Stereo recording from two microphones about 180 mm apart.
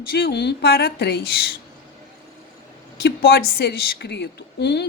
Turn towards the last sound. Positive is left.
turn(degrees=70)  # may be behind; listen again after turning